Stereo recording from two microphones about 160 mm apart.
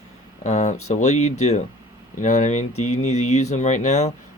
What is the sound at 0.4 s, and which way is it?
Speech, 45° left (ahead or behind).